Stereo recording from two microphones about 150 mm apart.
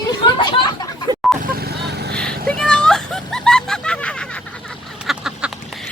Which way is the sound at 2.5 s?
5° left (ahead or behind).